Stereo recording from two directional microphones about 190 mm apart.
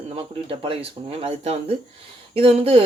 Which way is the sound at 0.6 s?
30° right (ahead or behind).